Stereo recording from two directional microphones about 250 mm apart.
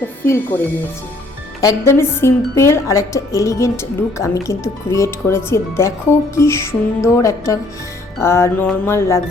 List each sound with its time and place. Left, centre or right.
1.6 s speech: centre